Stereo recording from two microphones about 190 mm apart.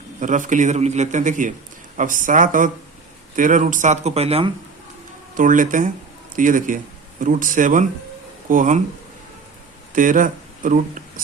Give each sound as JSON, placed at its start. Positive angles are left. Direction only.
{"t": 0.2, "sound": "a man's voice", "side_deg": -40}
{"t": 5.3, "sound": "speech", "side_deg": -45}
{"t": 9.9, "sound": "speech", "side_deg": -45}